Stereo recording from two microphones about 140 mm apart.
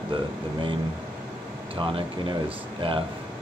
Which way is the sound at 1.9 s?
35° right (ahead or behind).